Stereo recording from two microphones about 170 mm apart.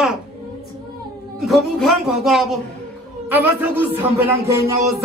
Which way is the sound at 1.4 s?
Centre (ahead or behind).